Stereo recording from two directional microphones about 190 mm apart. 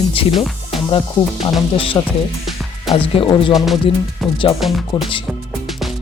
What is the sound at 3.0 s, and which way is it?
Music, 25° left (ahead or behind).